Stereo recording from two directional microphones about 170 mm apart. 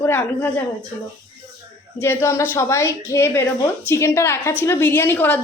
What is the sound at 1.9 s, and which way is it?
A woman's voice, 15° left (ahead or behind).